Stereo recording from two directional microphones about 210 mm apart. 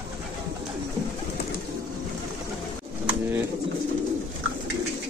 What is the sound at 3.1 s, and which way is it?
Pigeon, 10° right (ahead or behind).